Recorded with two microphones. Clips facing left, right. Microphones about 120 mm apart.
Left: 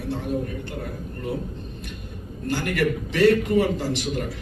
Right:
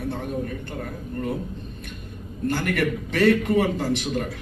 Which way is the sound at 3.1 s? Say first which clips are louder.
Left 1 dB; 50° right (ahead or behind).